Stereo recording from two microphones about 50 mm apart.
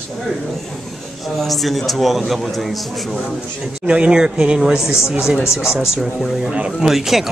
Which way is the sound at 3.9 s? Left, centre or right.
Centre.